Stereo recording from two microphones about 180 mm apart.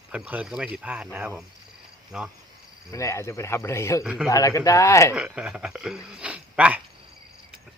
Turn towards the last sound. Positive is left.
turn(degrees=-5)  # may be behind; listen again after turning